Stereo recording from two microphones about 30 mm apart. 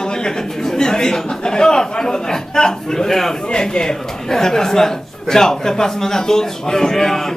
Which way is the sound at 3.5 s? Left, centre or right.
Left.